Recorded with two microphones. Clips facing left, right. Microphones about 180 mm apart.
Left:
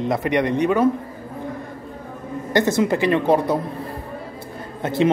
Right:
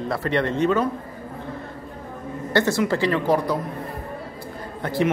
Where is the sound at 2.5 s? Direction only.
20° left (ahead or behind).